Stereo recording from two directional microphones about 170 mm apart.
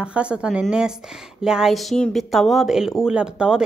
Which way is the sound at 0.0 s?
5° right (ahead or behind).